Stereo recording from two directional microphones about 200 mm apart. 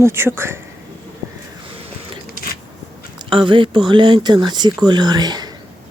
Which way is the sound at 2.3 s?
45° left (ahead or behind).